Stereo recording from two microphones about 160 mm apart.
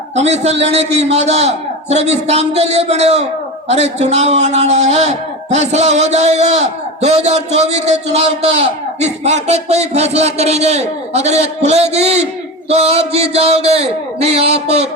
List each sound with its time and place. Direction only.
0.2 s a man's voice: 45° right (ahead or behind)